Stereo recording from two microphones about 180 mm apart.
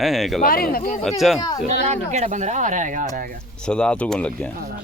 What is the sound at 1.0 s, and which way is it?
Speech, centre (ahead or behind).